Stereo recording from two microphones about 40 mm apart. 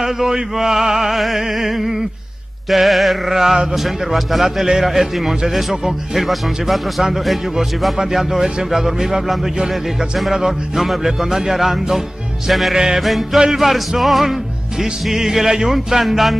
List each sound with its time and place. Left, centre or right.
0.0 s speech: centre
3.3 s speech: centre
12.7 s speech: centre
13.0 s speech: centre